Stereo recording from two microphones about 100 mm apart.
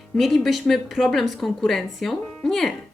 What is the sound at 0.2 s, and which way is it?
A woman's voice, centre (ahead or behind).